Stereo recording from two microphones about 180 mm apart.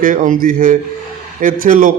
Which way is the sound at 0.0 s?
45° right (ahead or behind).